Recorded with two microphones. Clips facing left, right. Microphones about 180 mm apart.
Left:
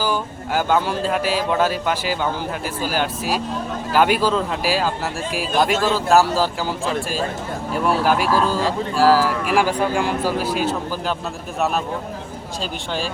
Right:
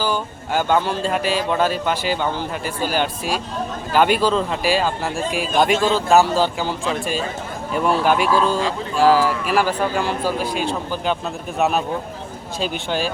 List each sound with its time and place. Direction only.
0.0 s speech: 10° left (ahead or behind)